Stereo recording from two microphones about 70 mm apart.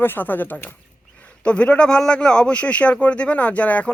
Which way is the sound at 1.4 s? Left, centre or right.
Centre.